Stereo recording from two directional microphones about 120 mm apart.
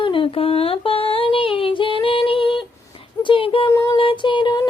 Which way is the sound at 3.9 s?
45° left (ahead or behind).